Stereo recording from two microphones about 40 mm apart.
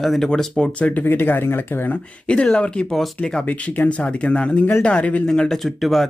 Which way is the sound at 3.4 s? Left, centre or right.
Left.